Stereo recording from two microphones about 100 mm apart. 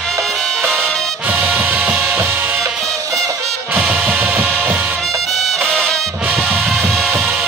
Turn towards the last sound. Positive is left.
turn(degrees=5)  # may be behind; listen again after turning